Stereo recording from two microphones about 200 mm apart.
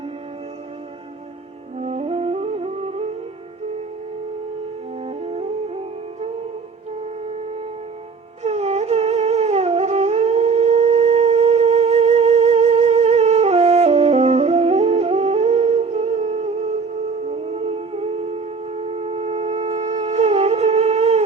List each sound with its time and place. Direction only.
1.8 s music: 30° right (ahead or behind)
5.0 s music: 30° right (ahead or behind)
8.4 s humming: 35° right (ahead or behind)
18.9 s wind instrument: 30° right (ahead or behind)